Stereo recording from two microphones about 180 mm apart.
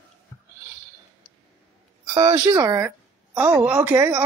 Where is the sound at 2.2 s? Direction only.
20° right (ahead or behind).